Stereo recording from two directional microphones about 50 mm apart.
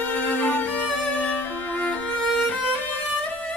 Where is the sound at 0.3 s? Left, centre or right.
Left.